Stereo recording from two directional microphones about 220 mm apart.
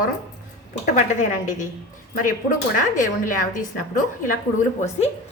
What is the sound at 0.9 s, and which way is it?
Speech, 35° left (ahead or behind).